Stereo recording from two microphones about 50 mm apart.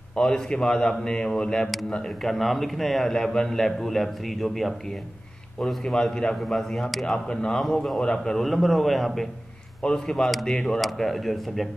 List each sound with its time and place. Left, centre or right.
0.2 s a man's voice: centre
8.0 s a man's voice: centre
8.4 s a man's voice: centre
9.8 s a man's voice: centre